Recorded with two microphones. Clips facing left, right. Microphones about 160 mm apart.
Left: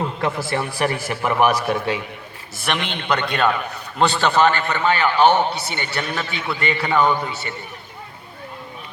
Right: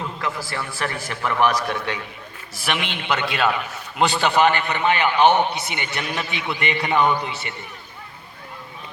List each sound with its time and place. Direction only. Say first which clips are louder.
0.2 s a man's voice: left 5 dB; 25° left (ahead or behind); by 7.1 s 20° right (ahead or behind)